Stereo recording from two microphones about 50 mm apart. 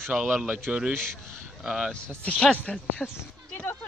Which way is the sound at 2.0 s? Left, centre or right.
Left.